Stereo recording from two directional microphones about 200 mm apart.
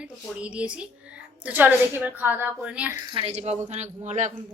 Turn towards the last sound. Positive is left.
turn(degrees=-35)  # may be behind; listen again after turning